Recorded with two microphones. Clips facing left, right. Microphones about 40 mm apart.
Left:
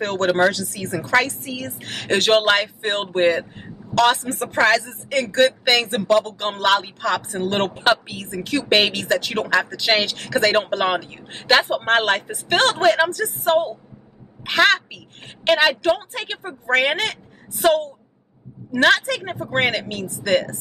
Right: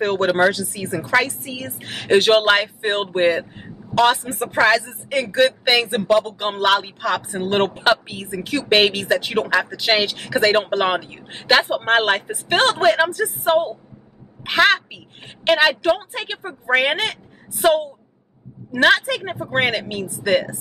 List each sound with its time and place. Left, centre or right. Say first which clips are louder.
0.0 s a woman's voice: right 1 dB; centre